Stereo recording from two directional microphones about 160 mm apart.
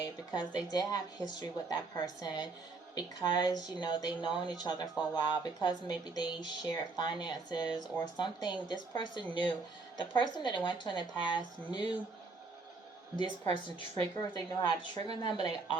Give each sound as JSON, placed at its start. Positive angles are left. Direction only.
{"t": 0.0, "sound": "speech", "side_deg": 25}
{"t": 13.1, "sound": "speech", "side_deg": 30}